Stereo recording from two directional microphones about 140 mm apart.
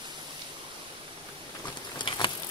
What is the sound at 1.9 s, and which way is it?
Patter, 35° left (ahead or behind).